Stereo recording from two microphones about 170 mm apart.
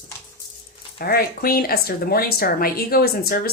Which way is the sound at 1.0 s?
60° left (ahead or behind).